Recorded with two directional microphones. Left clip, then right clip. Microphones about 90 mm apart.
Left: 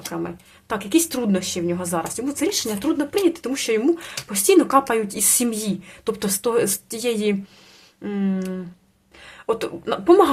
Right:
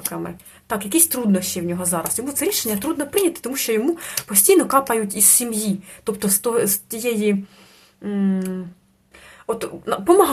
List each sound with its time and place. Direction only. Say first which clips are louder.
0.1 s speech: left 1 dB; 10° left (ahead or behind)
5.5 s speech: right 1 dB; 15° left (ahead or behind)
6.1 s speech: even; centre (ahead or behind)
8.0 s speech: right 2 dB; 15° left (ahead or behind)
9.2 s a sound: left 2 dB; 20° left (ahead or behind)
10.0 s speech: even; centre (ahead or behind)